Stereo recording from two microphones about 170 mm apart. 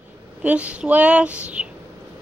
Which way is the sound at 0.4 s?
10° right (ahead or behind).